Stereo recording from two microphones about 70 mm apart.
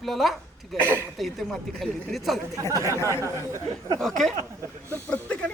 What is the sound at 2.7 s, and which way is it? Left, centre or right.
Speech, right.